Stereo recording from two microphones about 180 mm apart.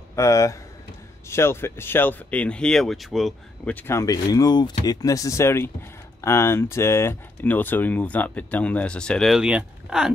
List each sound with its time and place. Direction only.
0.1 s speech: 15° left (ahead or behind); by 3.7 s centre (ahead or behind)
3.7 s speech: 15° left (ahead or behind); by 10.1 s 5° right (ahead or behind)